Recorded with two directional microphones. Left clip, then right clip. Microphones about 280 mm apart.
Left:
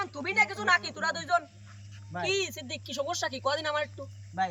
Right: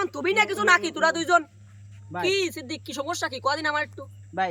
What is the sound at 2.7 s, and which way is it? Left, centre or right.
Speech, centre.